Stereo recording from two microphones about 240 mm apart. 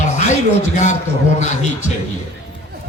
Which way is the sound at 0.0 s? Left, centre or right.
Left.